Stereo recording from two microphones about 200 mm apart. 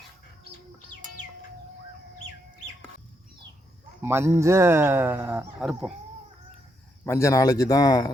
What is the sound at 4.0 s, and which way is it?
Speech, 10° right (ahead or behind).